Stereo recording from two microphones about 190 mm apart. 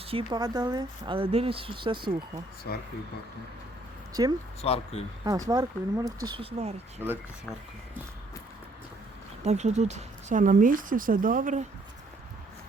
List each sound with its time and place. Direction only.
0.0 s speech: 30° right (ahead or behind)
2.7 s speech: 60° left (ahead or behind)
4.1 s speech: 20° right (ahead or behind)
4.6 s speech: 30° left (ahead or behind)
5.2 s speech: 20° right (ahead or behind)
7.0 s speech: 10° right (ahead or behind)
9.4 s speech: 35° right (ahead or behind)